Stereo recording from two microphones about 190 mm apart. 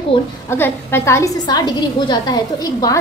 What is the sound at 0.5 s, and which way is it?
A woman's voice, 10° left (ahead or behind).